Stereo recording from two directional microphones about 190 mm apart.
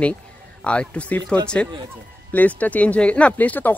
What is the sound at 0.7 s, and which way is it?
Speech, 5° left (ahead or behind).